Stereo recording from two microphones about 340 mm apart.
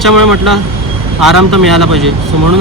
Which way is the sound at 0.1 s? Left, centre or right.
Right.